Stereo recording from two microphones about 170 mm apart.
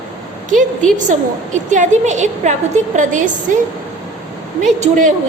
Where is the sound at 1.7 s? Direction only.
45° right (ahead or behind).